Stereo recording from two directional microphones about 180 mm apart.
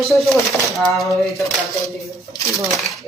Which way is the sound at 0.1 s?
Centre (ahead or behind).